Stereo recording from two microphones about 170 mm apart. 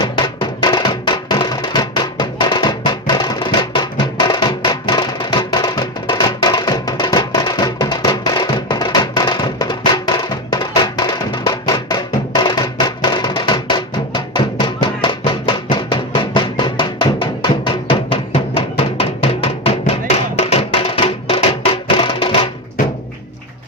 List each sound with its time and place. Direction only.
0.0 s music: 25° left (ahead or behind)